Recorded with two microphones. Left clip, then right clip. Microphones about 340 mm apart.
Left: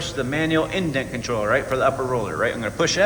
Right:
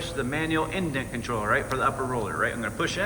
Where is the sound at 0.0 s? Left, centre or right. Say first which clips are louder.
Left 5 dB; centre.